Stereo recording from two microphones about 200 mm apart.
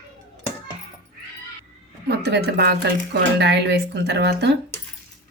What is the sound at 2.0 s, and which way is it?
A woman's voice, 55° right (ahead or behind).